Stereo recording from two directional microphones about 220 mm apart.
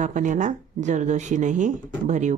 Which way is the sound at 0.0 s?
35° right (ahead or behind).